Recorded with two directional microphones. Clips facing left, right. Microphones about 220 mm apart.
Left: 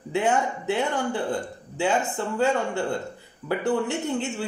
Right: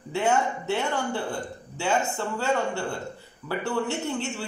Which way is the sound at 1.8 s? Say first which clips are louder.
Left 2 dB; 15° left (ahead or behind).